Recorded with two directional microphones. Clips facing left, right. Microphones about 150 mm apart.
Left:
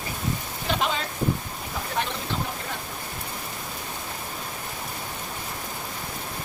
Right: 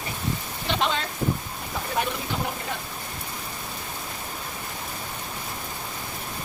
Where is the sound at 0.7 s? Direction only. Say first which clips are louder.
Right 1 dB; 5° left (ahead or behind).